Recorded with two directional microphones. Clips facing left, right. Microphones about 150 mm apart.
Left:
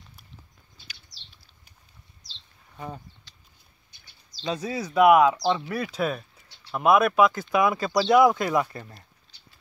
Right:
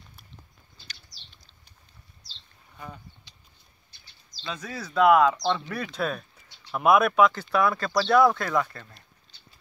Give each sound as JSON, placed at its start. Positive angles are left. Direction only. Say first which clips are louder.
{"t": 0.8, "sound": "bird", "louder": "right 1 dB", "side_deg": 5}
{"t": 4.5, "sound": "speech", "louder": "left 7 dB", "side_deg": 30}
{"t": 4.7, "sound": "speech", "louder": "left 2 dB", "side_deg": 15}